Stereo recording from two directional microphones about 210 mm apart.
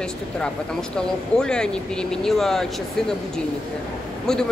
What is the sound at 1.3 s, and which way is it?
Speech, 5° left (ahead or behind).